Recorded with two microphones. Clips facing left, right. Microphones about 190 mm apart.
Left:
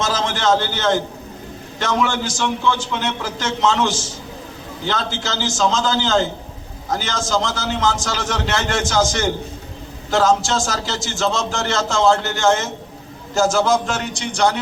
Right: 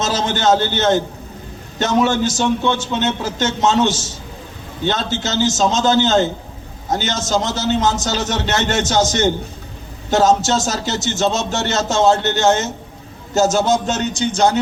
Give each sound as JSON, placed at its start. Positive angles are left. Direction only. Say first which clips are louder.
{"t": 0.0, "sound": "a man's voice", "louder": "right 2 dB", "side_deg": -25}